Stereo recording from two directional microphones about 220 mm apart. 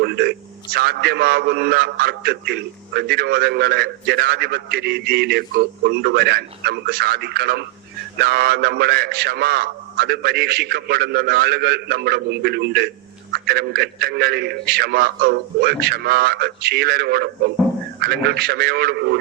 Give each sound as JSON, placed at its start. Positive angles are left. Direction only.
{"t": 0.0, "sound": "a man's voice", "side_deg": -50}